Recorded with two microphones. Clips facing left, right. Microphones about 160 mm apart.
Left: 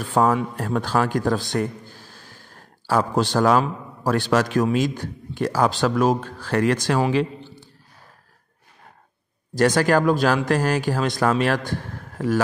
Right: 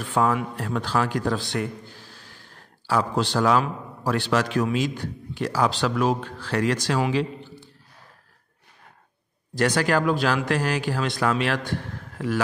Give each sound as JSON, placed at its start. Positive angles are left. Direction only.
{"t": 0.1, "sound": "a man's voice", "side_deg": 40}
{"t": 9.6, "sound": "speech", "side_deg": 45}